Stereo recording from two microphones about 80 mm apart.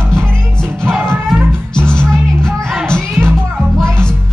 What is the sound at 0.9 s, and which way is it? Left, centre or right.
Music, right.